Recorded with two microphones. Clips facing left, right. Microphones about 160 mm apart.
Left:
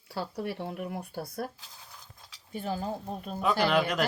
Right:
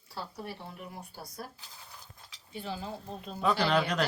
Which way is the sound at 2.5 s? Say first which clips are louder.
Left 5 dB; 50° left (ahead or behind).